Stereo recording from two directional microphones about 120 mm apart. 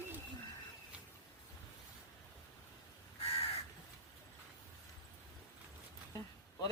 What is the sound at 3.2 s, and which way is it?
Crow, 60° left (ahead or behind).